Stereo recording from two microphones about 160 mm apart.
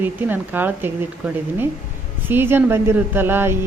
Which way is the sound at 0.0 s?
10° right (ahead or behind).